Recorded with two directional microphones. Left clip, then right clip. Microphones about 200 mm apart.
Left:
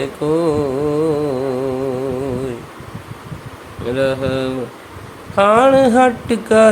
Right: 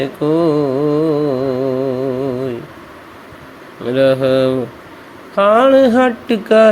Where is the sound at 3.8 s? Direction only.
15° right (ahead or behind).